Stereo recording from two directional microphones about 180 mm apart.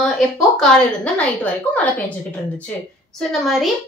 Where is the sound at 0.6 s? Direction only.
5° left (ahead or behind).